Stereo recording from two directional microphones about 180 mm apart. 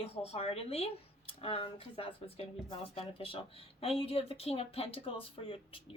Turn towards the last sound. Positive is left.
turn(degrees=30)  # may be behind; listen again after turning